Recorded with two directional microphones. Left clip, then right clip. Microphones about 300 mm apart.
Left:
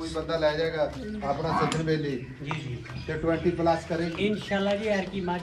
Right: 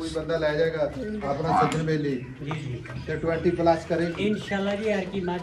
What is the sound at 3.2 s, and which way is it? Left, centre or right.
Speech, left.